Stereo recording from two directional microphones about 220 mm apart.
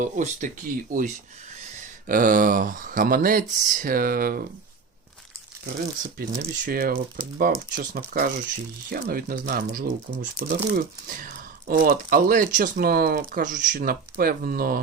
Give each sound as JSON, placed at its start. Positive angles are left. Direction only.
{"t": 0.0, "sound": "speech", "side_deg": -35}
{"t": 6.0, "sound": "speech", "side_deg": -40}